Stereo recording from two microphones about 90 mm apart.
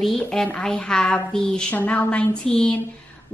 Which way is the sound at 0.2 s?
5° left (ahead or behind).